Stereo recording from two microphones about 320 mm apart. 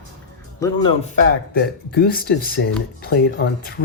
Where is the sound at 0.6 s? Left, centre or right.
Centre.